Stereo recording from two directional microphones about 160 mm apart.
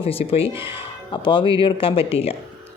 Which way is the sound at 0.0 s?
35° left (ahead or behind).